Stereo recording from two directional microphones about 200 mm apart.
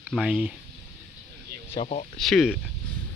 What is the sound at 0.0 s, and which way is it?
Speech, 5° right (ahead or behind).